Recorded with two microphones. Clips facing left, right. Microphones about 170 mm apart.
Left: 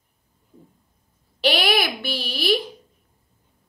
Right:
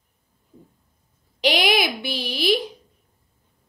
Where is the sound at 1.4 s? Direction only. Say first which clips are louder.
Right 1 dB; 15° right (ahead or behind).